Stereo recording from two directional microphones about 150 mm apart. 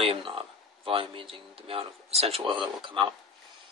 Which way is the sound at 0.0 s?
40° right (ahead or behind).